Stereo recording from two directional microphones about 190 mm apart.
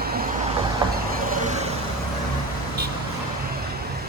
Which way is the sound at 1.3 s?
40° right (ahead or behind).